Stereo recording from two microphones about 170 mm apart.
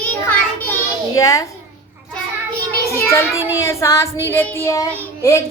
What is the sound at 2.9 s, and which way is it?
Child singing, 15° left (ahead or behind).